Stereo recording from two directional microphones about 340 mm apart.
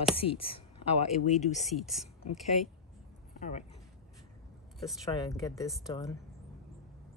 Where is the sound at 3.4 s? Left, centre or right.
Left.